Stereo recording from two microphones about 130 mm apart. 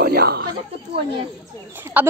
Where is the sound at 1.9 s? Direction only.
15° right (ahead or behind).